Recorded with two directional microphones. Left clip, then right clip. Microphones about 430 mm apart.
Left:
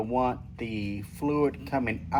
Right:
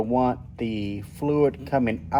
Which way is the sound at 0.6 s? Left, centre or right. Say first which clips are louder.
Right 5 dB; right.